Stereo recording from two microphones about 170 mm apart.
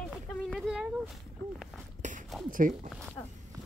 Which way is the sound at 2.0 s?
45° right (ahead or behind).